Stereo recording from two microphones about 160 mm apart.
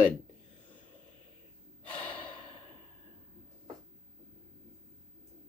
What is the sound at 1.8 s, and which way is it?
Gasp, 10° left (ahead or behind).